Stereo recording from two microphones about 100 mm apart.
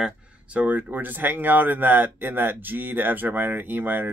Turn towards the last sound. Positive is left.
turn(degrees=-20)  # may be behind; listen again after turning